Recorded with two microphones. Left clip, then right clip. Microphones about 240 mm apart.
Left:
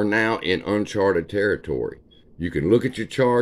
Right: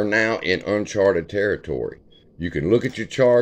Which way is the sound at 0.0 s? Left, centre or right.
Centre.